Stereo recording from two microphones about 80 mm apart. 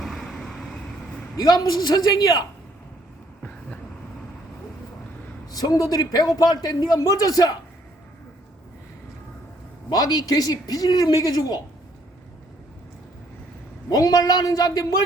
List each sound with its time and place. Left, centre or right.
0.0 s vehicle: centre
1.4 s a man's voice: left
5.5 s a man's voice: left
9.9 s a man's voice: left
13.9 s a man's voice: left